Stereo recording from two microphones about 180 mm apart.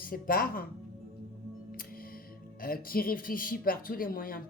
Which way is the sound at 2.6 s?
55° left (ahead or behind).